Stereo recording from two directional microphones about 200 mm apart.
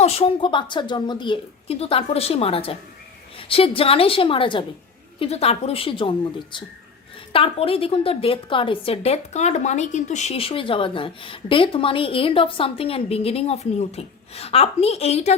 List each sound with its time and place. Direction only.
0.0 s a woman's voice: 30° left (ahead or behind)